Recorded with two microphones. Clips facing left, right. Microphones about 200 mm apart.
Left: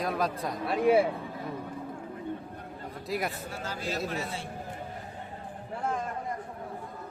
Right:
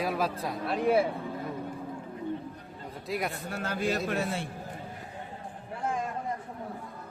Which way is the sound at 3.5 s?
60° right (ahead or behind).